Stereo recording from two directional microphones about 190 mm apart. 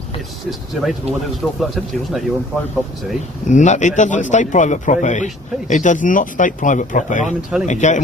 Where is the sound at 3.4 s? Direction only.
40° left (ahead or behind).